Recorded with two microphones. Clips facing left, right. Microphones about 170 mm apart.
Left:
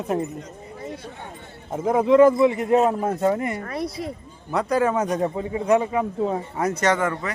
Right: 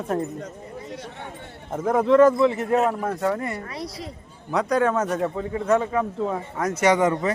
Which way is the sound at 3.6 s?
50° left (ahead or behind).